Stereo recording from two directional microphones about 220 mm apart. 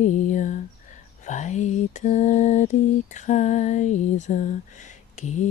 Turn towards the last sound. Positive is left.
turn(degrees=30)  # may be behind; listen again after turning